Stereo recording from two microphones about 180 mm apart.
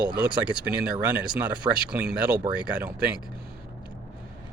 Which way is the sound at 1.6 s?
25° left (ahead or behind).